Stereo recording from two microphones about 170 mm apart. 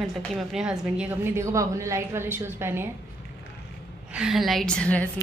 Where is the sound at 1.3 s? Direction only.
15° right (ahead or behind).